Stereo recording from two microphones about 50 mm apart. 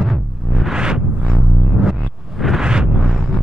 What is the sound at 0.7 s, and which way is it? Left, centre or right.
Music, centre.